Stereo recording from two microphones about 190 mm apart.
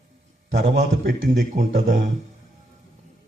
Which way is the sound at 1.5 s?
40° right (ahead or behind).